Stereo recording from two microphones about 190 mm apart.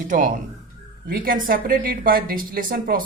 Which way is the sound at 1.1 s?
50° right (ahead or behind).